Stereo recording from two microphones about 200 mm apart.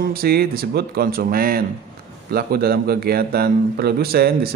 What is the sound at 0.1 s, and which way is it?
A man's voice, 50° right (ahead or behind).